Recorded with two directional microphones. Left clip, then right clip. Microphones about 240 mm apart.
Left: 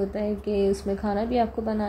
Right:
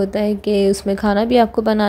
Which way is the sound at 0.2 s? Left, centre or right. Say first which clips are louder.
Right 8 dB; right.